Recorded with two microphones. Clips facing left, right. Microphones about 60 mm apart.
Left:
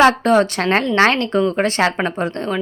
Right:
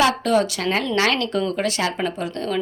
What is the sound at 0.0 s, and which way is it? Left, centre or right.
Speech, left.